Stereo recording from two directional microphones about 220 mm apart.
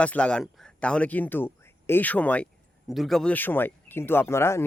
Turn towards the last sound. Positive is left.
turn(degrees=10)  # may be behind; listen again after turning